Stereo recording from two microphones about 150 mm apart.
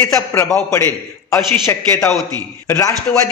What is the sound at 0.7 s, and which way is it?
A man's voice, 20° left (ahead or behind).